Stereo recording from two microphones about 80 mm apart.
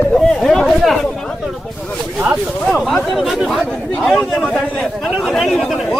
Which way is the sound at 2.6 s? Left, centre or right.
Centre.